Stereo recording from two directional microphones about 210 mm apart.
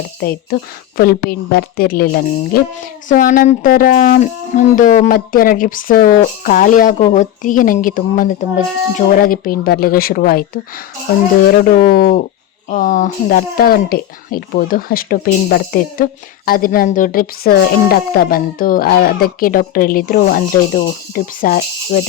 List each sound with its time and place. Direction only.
0.2 s speech: 45° left (ahead or behind)